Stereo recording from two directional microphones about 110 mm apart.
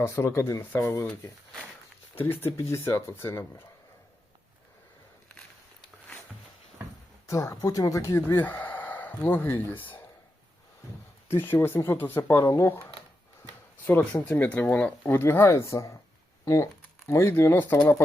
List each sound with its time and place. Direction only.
0.0 s speech: 25° left (ahead or behind)
2.1 s speech: 20° left (ahead or behind)
7.3 s speech: 30° left (ahead or behind)
8.4 s a sound: 15° left (ahead or behind)
9.2 s speech: 20° left (ahead or behind)
11.3 s speech: 20° left (ahead or behind)
13.8 s speech: 15° left (ahead or behind)
17.1 s speech: 25° left (ahead or behind)